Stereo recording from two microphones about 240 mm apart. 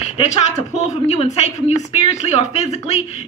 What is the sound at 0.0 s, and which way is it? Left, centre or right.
A woman's voice, left.